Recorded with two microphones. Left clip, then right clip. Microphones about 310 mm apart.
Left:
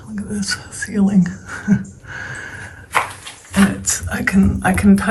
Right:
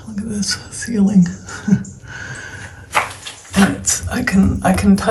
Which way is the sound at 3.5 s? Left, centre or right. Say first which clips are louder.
Right 2 dB; centre.